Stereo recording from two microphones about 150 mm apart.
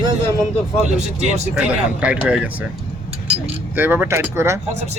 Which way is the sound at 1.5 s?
5° right (ahead or behind).